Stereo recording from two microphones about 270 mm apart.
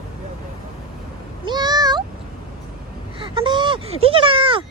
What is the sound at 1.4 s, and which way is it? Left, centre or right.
Meow, centre.